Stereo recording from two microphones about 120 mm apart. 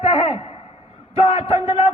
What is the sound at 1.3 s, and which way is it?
Speech, 50° left (ahead or behind).